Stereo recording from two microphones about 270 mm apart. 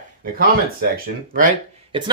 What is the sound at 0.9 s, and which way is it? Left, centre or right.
Speech, right.